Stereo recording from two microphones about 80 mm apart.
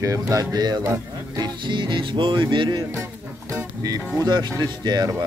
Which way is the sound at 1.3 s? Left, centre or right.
Right.